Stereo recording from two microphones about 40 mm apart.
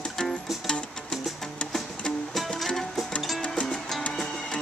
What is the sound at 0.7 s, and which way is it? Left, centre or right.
Music, left.